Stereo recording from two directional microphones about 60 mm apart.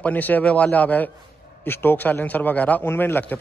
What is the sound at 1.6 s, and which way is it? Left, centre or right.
A man's voice, left.